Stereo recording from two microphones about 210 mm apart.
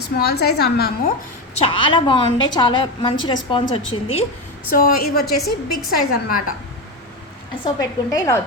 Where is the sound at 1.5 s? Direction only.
25° left (ahead or behind).